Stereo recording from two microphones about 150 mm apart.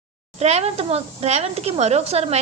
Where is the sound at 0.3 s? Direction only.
45° right (ahead or behind).